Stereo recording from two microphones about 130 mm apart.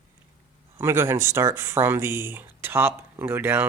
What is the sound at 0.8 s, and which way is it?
Speech, 20° right (ahead or behind).